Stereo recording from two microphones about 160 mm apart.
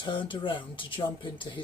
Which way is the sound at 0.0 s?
30° left (ahead or behind).